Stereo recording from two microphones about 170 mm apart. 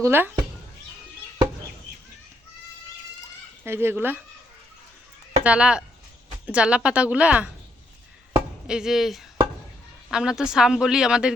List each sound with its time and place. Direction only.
0.0 s a woman's voice: 15° right (ahead or behind)
3.6 s a woman's voice: 15° right (ahead or behind)
5.4 s a woman's voice: 5° right (ahead or behind)
8.6 s speech: 5° right (ahead or behind)